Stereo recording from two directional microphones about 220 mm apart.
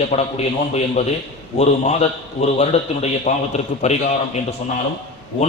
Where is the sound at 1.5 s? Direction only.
30° left (ahead or behind).